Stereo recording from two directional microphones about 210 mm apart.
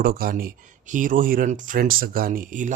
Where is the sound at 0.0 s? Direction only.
45° right (ahead or behind).